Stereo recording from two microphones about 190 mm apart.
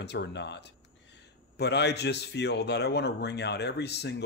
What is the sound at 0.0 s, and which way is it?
A man's voice, 65° left (ahead or behind).